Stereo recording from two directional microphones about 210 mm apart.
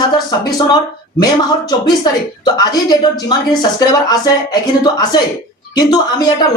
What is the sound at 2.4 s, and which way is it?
Speech, 20° left (ahead or behind).